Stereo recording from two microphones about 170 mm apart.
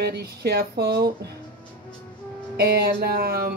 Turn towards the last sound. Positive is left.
turn(degrees=-65)  # may be behind; listen again after turning